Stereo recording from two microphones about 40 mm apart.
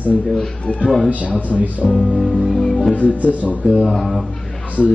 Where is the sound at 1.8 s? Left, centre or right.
Left.